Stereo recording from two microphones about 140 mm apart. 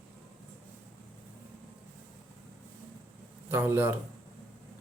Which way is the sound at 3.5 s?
15° right (ahead or behind).